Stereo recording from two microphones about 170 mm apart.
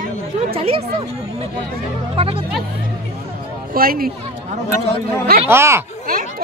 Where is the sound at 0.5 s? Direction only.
35° right (ahead or behind).